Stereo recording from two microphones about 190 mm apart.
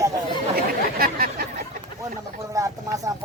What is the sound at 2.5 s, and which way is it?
Speech, 15° right (ahead or behind).